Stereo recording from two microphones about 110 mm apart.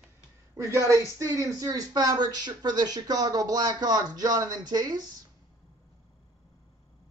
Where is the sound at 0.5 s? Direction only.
25° right (ahead or behind).